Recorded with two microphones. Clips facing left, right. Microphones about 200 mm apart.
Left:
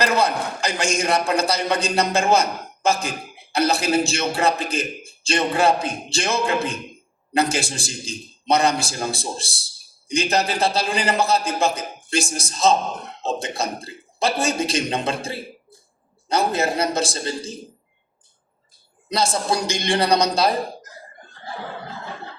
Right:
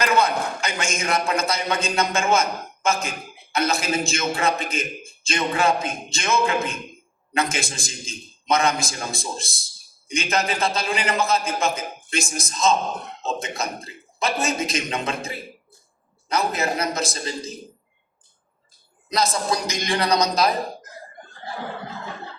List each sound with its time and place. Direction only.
0.0 s a man's voice: 35° left (ahead or behind)
19.1 s a man's voice: 30° left (ahead or behind)